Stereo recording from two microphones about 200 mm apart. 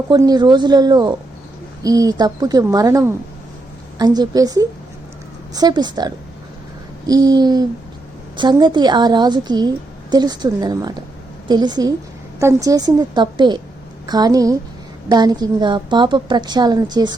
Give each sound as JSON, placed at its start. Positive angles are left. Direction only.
{"t": 0.1, "sound": "a woman's voice", "side_deg": -20}